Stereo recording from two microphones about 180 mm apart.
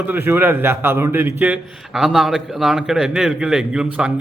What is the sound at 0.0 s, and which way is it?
A man's voice, 10° right (ahead or behind).